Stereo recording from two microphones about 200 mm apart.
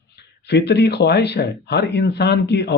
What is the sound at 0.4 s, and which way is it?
Speech, 55° left (ahead or behind).